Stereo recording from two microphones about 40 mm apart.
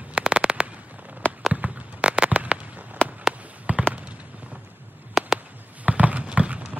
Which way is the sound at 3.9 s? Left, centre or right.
Right.